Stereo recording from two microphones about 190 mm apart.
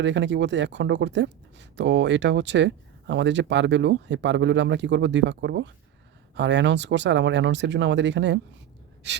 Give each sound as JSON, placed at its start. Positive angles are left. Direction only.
{"t": 0.0, "sound": "speech", "side_deg": -70}
{"t": 9.0, "sound": "gasp", "side_deg": -65}